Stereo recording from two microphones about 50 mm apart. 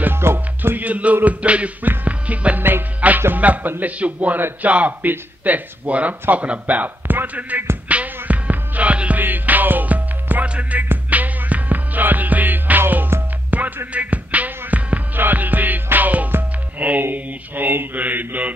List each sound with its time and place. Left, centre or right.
0.0 s music: right
0.6 s mantra: right
1.1 s music: right
3.3 s a man's voice: right
4.0 s music: right
4.4 s mantra: right
7.9 s music: right
9.2 s music: right
17.1 s mantra: right